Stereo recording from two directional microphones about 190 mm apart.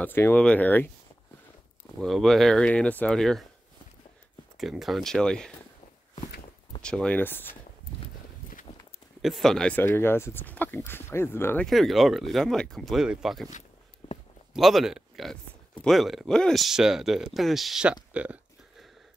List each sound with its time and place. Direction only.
0.0 s speech: 10° left (ahead or behind)
2.0 s speech: centre (ahead or behind)
4.6 s speech: centre (ahead or behind)
6.8 s speech: 5° left (ahead or behind)
8.7 s walk: 35° left (ahead or behind)
9.2 s speech: centre (ahead or behind)
13.5 s a sound: 40° left (ahead or behind)
14.5 s speech: centre (ahead or behind)
18.1 s a sound: 5° right (ahead or behind)